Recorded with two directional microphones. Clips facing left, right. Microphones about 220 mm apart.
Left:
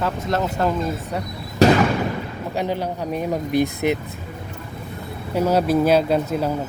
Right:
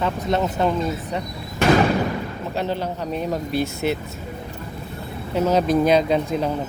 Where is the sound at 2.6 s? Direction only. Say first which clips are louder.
Left 1 dB; 10° left (ahead or behind).